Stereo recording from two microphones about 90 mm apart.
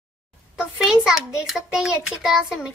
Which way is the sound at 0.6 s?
5° right (ahead or behind).